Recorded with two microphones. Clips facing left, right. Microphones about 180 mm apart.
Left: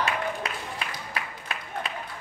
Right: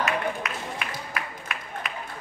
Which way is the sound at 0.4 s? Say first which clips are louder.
Right 1 dB; 30° left (ahead or behind).